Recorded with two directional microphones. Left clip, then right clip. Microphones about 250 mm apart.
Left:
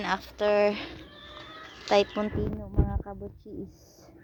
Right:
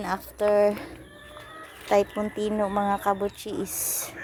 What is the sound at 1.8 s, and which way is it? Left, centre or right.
Speech, centre.